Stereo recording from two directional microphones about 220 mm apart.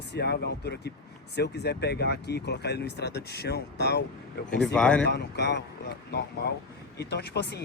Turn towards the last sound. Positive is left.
turn(degrees=50)  # may be behind; listen again after turning